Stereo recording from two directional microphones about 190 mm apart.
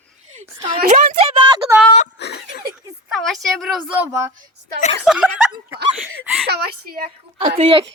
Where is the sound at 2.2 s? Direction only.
60° left (ahead or behind).